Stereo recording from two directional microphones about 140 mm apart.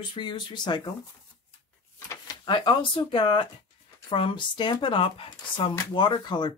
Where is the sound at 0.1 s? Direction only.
35° left (ahead or behind).